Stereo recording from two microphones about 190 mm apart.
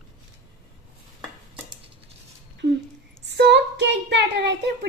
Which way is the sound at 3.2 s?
60° right (ahead or behind).